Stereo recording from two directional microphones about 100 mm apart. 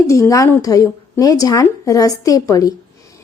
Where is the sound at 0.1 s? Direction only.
30° left (ahead or behind).